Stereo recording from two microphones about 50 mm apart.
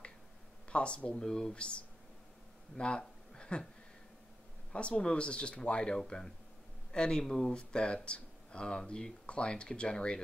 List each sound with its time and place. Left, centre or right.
0.7 s speech: left
2.8 s a sound: centre
4.7 s speech: left
7.5 s speech: centre